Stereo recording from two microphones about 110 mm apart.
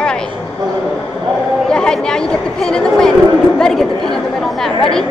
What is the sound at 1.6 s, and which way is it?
Chatter, 5° left (ahead or behind).